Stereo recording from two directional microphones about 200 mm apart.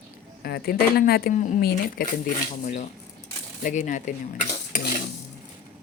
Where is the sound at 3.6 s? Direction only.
40° left (ahead or behind).